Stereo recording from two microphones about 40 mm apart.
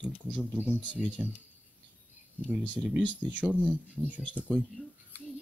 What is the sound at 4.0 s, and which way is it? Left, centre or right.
Speech, centre.